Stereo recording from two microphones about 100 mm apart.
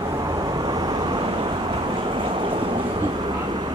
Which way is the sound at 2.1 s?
55° right (ahead or behind).